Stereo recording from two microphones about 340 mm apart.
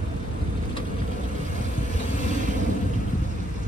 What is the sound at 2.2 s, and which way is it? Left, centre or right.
Vehicle, right.